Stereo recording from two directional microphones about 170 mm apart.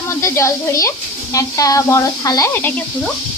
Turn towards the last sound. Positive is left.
turn(degrees=10)  # may be behind; listen again after turning